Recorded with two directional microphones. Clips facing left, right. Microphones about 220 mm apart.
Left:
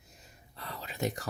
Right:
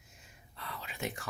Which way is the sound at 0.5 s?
35° left (ahead or behind).